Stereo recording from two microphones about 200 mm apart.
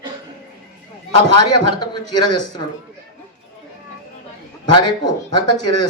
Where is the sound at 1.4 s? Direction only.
20° left (ahead or behind).